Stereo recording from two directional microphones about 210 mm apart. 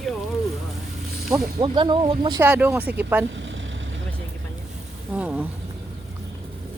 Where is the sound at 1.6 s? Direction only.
20° right (ahead or behind).